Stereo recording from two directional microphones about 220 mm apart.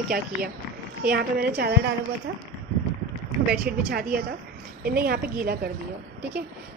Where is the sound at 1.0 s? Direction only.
45° right (ahead or behind).